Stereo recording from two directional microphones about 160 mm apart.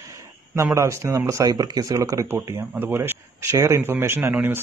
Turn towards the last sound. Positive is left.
turn(degrees=-15)  # may be behind; listen again after turning